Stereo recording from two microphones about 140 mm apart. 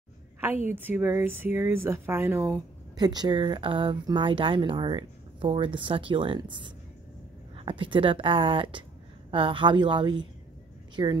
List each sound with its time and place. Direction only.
0.7 s speech: 15° right (ahead or behind); by 11.1 s 30° right (ahead or behind)